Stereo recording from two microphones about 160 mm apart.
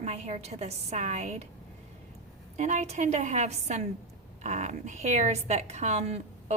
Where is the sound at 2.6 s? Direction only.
45° right (ahead or behind).